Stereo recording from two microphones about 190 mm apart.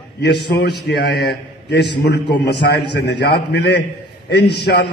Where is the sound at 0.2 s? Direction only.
60° left (ahead or behind).